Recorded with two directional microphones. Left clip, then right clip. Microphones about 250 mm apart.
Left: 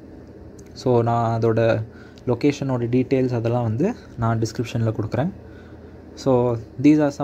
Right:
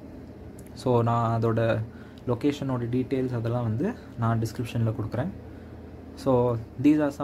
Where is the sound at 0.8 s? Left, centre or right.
Centre.